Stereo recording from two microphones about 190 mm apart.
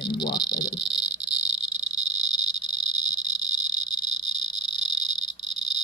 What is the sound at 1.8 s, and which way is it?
Cricket, 35° right (ahead or behind).